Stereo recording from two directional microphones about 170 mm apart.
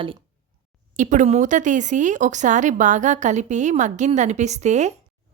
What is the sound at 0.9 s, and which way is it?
A woman's voice, 45° right (ahead or behind).